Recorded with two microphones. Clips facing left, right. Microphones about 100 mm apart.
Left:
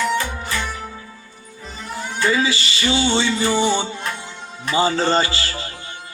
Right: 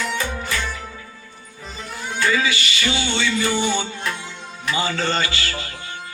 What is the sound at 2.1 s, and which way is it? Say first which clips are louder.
Music: left 1 dB; 30° left (ahead or behind).